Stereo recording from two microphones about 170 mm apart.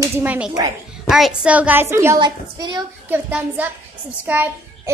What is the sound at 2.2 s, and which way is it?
Speech, 25° right (ahead or behind).